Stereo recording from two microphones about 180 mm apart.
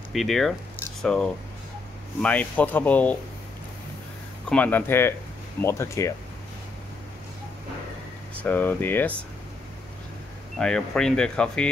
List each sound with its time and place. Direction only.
0.1 s speech: centre (ahead or behind)
4.5 s speech: 10° left (ahead or behind)
8.4 s speech: 10° left (ahead or behind)
10.6 s speech: 5° left (ahead or behind)